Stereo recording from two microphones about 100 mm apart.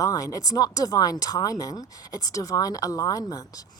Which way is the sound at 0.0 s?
35° left (ahead or behind).